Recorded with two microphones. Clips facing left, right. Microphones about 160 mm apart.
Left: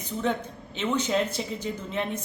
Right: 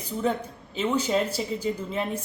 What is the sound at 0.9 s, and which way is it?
A man's voice, 5° right (ahead or behind).